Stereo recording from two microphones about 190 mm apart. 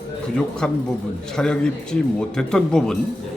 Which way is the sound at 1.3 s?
5° left (ahead or behind).